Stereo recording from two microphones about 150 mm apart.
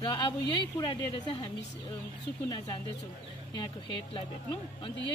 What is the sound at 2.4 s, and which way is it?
Speech, 25° left (ahead or behind).